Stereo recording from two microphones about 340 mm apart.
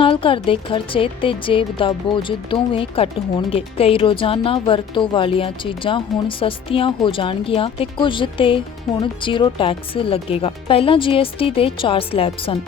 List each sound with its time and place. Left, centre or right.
0.0 s speech: centre